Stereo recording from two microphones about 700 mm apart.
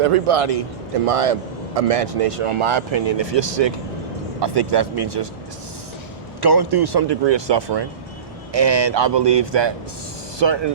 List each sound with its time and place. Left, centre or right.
0.0 s speech: right
6.4 s speech: right